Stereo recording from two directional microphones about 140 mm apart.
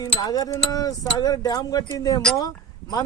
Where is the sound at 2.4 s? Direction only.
25° left (ahead or behind).